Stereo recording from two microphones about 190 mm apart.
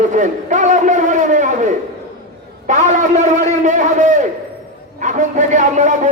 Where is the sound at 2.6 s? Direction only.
40° right (ahead or behind).